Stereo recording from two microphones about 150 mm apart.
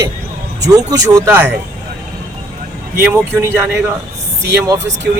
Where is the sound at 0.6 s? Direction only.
25° right (ahead or behind).